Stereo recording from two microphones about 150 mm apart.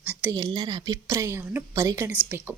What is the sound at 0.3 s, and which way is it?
A woman's voice, 25° right (ahead or behind).